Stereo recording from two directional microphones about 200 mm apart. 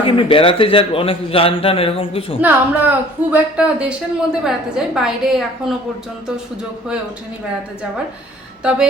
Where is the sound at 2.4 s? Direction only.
10° right (ahead or behind).